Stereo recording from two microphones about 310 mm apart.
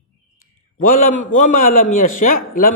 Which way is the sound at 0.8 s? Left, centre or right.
Left.